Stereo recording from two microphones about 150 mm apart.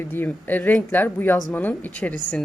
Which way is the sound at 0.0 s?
15° left (ahead or behind).